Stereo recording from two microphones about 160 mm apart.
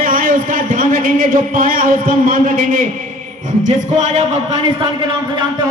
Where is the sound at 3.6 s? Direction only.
45° right (ahead or behind).